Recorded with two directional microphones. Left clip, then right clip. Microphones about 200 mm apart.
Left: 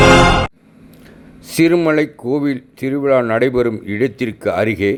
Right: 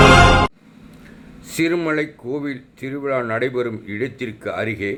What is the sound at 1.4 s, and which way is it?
Speech, 25° left (ahead or behind).